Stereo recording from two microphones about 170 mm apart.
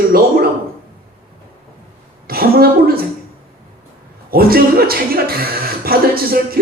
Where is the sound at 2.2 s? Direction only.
60° right (ahead or behind).